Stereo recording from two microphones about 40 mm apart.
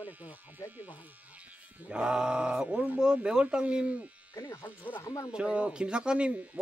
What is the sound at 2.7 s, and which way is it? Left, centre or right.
Speech, right.